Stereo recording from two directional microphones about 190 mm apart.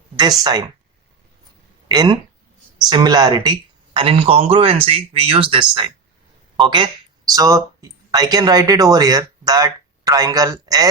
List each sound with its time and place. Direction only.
1.9 s speech: 20° right (ahead or behind)